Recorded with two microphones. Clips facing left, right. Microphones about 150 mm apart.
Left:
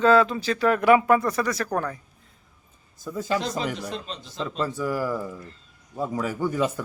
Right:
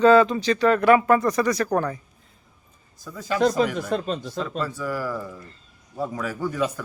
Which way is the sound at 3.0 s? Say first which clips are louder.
Left 2 dB; 25° left (ahead or behind).